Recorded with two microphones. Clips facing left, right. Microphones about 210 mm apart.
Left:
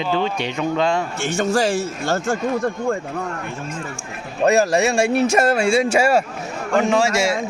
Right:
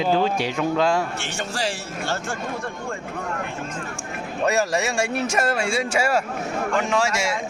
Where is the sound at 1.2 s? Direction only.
45° left (ahead or behind).